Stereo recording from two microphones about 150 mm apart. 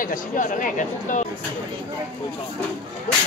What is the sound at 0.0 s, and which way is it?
Speech, 60° left (ahead or behind).